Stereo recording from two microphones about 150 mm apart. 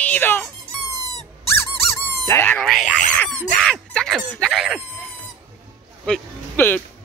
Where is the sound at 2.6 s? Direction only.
Centre (ahead or behind).